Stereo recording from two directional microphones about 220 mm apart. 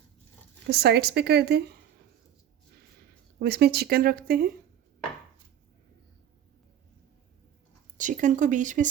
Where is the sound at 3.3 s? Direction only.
50° right (ahead or behind).